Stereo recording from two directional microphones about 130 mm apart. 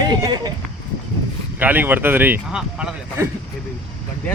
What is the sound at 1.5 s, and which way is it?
Speech, 15° right (ahead or behind).